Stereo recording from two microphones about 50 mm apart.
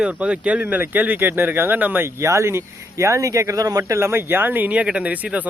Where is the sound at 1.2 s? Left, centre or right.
Right.